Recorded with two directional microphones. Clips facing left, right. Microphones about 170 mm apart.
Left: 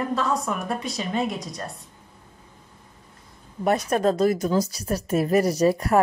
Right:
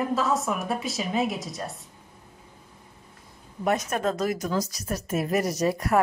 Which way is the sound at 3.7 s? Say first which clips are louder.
Left 4 dB; 35° left (ahead or behind).